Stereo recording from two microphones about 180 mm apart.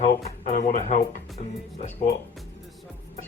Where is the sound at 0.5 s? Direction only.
45° left (ahead or behind).